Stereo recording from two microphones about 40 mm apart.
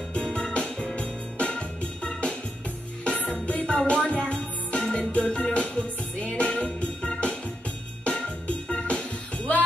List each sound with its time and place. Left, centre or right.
0.1 s music: left